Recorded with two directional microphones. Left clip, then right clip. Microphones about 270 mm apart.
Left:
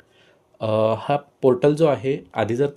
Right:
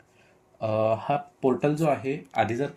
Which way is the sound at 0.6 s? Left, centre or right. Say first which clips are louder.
Left 4 dB; left.